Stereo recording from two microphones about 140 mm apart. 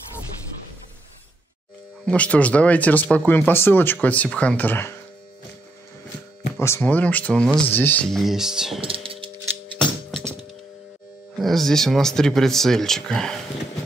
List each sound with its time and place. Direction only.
2.0 s speech: 10° left (ahead or behind)
6.5 s speech: 15° left (ahead or behind); by 8.8 s 5° right (ahead or behind)
8.8 s a sound: 40° right (ahead or behind)
9.8 s music: 5° left (ahead or behind)
11.3 s speech: centre (ahead or behind)